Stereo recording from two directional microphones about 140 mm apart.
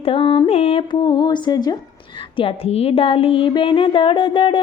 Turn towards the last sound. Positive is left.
turn(degrees=40)  # may be behind; listen again after turning